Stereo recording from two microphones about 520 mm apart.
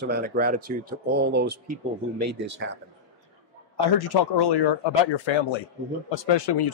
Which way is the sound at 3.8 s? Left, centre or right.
Left.